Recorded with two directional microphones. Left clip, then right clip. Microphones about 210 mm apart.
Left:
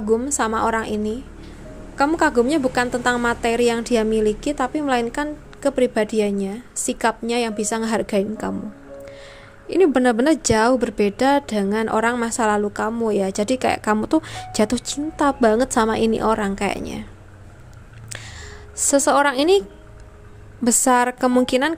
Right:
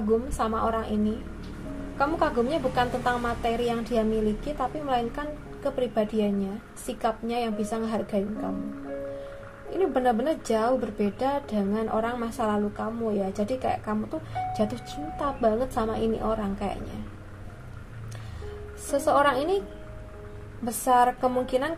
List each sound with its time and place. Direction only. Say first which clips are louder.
0.4 s a woman's voice: left 6 dB; 40° left (ahead or behind)
9.7 s a woman's voice: left 8 dB; 45° left (ahead or behind)
18.9 s a woman's voice: left 5 dB; 45° left (ahead or behind)
20.6 s a woman's voice: left 4 dB; 45° left (ahead or behind)